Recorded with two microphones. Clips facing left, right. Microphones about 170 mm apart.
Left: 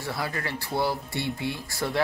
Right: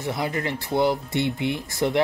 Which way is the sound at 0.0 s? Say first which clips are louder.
Right 5 dB; 20° right (ahead or behind).